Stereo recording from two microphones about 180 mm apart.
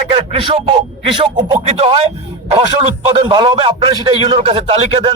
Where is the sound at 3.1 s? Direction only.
25° right (ahead or behind).